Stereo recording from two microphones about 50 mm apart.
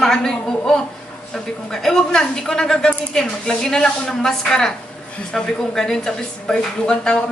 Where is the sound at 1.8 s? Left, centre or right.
Centre.